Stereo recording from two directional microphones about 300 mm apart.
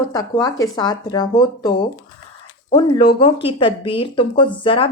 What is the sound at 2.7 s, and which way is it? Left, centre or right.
Speech, centre.